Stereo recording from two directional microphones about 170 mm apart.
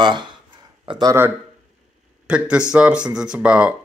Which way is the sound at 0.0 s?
25° right (ahead or behind).